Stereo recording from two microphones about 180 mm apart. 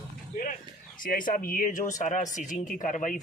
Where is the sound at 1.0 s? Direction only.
50° left (ahead or behind).